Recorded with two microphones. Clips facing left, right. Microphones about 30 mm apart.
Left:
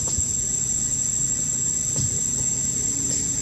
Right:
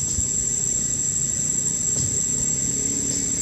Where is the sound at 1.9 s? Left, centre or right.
Centre.